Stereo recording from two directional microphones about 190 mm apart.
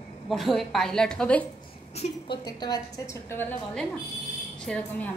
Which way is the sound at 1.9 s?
35° left (ahead or behind).